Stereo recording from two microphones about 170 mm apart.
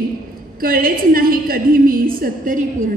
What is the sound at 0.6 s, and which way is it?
A woman's voice, 60° right (ahead or behind).